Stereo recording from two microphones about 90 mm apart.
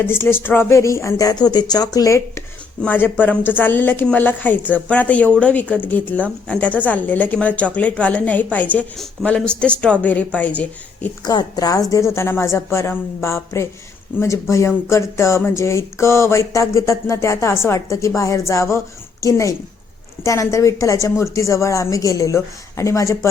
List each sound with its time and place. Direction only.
0.0 s speech: 25° left (ahead or behind)
1.5 s speech: 50° left (ahead or behind); by 2.4 s 35° left (ahead or behind)
2.8 s a woman's voice: 20° left (ahead or behind)
11.3 s a sound: 50° left (ahead or behind); by 23.3 s 35° left (ahead or behind)